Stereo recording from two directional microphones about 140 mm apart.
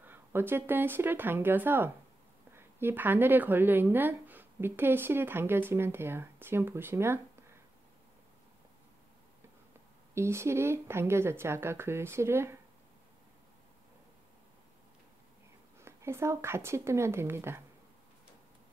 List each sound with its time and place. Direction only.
0.0 s speech: 15° right (ahead or behind)
10.1 s speech: 20° right (ahead or behind)
15.8 s speech: 20° right (ahead or behind)